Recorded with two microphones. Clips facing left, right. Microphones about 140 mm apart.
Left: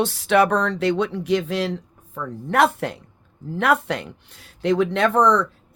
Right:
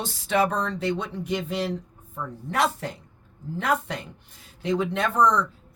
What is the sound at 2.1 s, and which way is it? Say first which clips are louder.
Speech: left 7 dB; 65° left (ahead or behind).